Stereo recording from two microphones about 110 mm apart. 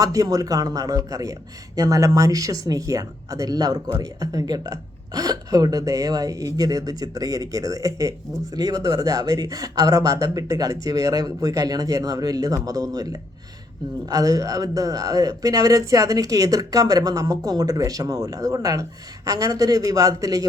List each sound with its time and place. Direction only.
0.0 s speech: 30° right (ahead or behind)
14.1 s speech: 35° right (ahead or behind)